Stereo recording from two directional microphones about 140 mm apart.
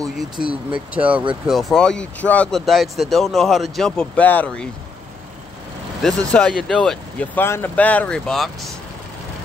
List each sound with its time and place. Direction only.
0.4 s speech: 40° right (ahead or behind)
0.9 s speech: 10° right (ahead or behind); by 4.6 s 10° left (ahead or behind)
6.0 s speech: 5° left (ahead or behind)